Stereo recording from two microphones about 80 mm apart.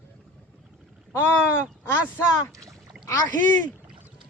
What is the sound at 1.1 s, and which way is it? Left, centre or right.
Speech, left.